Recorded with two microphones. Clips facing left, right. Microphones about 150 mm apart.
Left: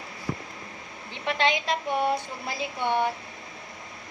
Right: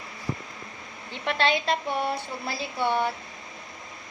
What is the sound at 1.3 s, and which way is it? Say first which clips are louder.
A woman's voice: right 1 dB; 15° left (ahead or behind).